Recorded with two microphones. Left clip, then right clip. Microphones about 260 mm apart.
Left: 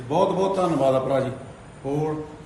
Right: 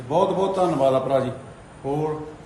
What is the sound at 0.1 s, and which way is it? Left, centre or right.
Speech, centre.